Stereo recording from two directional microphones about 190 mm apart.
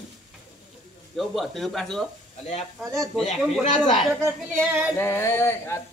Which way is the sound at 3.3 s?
Centre (ahead or behind).